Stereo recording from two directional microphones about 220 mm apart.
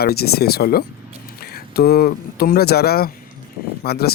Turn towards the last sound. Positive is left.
turn(degrees=45)  # may be behind; listen again after turning